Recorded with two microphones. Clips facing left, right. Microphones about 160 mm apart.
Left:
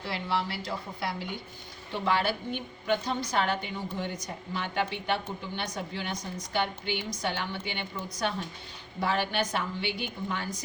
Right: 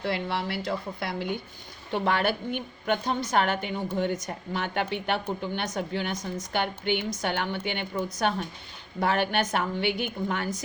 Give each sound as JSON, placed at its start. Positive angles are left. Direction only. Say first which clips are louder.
{"t": 0.0, "sound": "a woman's voice", "louder": "right 2 dB", "side_deg": -55}